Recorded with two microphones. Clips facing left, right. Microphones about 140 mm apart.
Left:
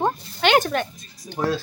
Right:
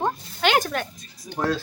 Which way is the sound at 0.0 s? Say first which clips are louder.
Left 2 dB; centre (ahead or behind).